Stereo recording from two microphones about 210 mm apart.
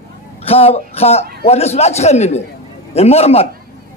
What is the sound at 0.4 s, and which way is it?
A man's voice, 30° left (ahead or behind).